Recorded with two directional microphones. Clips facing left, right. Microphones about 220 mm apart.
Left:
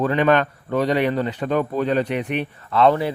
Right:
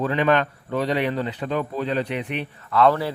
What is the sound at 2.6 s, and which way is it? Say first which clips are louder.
Speech: left 1 dB; 25° left (ahead or behind).